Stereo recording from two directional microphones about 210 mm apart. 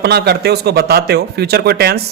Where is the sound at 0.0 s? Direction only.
50° right (ahead or behind).